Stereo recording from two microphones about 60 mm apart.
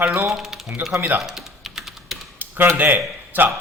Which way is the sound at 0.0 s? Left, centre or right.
Right.